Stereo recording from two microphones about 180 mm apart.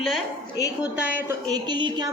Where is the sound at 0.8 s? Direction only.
10° right (ahead or behind).